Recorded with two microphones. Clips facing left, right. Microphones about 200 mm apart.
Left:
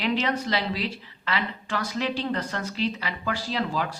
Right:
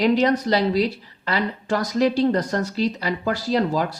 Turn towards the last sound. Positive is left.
turn(degrees=-40)  # may be behind; listen again after turning